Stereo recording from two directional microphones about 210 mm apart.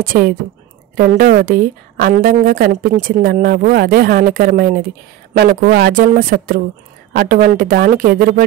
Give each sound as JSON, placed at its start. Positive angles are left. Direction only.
{"t": 0.0, "sound": "a woman's voice", "side_deg": -40}